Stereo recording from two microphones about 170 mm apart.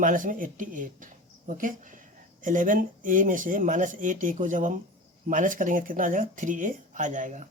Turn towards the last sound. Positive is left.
turn(degrees=-45)  # may be behind; listen again after turning